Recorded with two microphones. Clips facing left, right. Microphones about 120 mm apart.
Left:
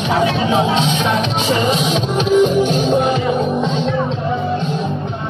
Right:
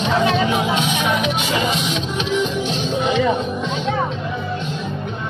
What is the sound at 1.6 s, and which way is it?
Music, 40° left (ahead or behind).